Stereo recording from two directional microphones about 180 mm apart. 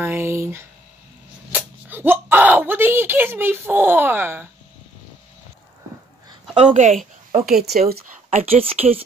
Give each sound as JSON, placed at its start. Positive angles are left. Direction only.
{"t": 0.0, "sound": "speech", "side_deg": -15}
{"t": 1.5, "sound": "a sound", "side_deg": -10}
{"t": 6.5, "sound": "speech", "side_deg": -35}
{"t": 7.4, "sound": "speech", "side_deg": -55}
{"t": 8.3, "sound": "speech", "side_deg": -35}